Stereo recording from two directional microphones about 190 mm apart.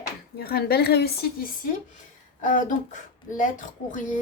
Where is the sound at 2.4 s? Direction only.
45° left (ahead or behind).